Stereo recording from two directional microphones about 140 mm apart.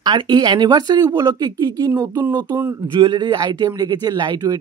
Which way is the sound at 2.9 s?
35° right (ahead or behind).